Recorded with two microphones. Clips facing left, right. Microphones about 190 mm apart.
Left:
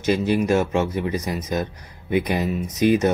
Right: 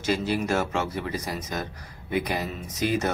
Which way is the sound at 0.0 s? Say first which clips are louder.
Left 6 dB; 20° left (ahead or behind).